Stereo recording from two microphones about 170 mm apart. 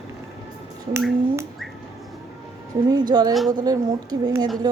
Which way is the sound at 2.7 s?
25° right (ahead or behind).